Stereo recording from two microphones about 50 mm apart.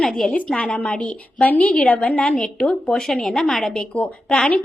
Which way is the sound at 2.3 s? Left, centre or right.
Centre.